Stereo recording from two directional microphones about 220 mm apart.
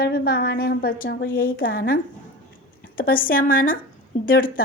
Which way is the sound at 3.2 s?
40° left (ahead or behind).